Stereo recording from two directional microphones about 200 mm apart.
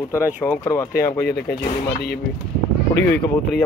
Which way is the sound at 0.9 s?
50° left (ahead or behind).